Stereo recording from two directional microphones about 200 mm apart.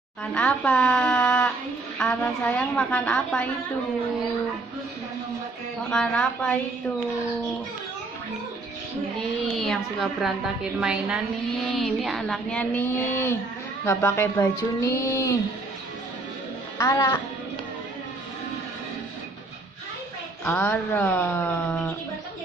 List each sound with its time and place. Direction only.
0.2 s a woman's voice: 5° left (ahead or behind)
5.9 s a woman's voice: 5° left (ahead or behind)
9.6 s a woman's voice: centre (ahead or behind)
16.7 s a woman's voice: 15° left (ahead or behind)
20.4 s speech: 10° left (ahead or behind)